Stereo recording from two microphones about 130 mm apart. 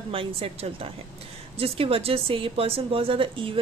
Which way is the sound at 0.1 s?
45° right (ahead or behind).